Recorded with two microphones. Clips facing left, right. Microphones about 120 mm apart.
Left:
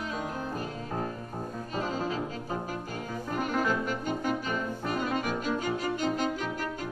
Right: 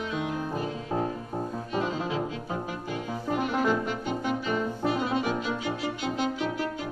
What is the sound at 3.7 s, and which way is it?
Music, 45° left (ahead or behind).